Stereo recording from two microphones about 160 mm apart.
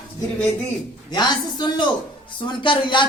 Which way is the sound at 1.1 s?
25° left (ahead or behind).